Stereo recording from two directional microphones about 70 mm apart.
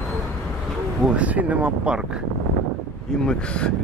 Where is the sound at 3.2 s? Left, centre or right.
Centre.